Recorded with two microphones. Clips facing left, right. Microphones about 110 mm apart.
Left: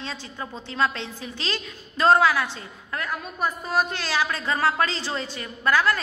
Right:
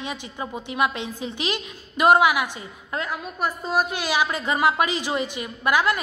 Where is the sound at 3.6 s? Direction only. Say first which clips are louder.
Right 2 dB; 15° right (ahead or behind).